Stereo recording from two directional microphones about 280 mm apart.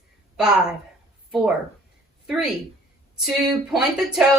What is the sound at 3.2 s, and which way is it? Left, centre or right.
A woman's voice, centre.